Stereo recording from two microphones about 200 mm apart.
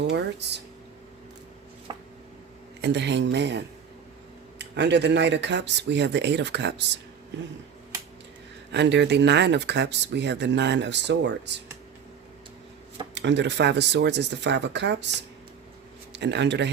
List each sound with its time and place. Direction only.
0.0 s speech: 60° right (ahead or behind)
1.9 s a sound: 20° right (ahead or behind)
2.8 s speech: 60° right (ahead or behind)
8.7 s speech: 60° right (ahead or behind)
13.1 s speech: 60° right (ahead or behind)
16.1 s speech: 60° right (ahead or behind)